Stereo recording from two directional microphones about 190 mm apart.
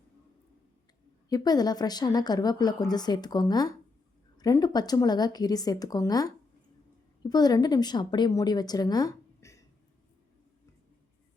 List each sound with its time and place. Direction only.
1.3 s a woman's voice: 20° left (ahead or behind)